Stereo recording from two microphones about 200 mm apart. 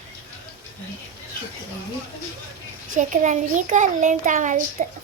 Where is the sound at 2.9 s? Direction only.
40° right (ahead or behind).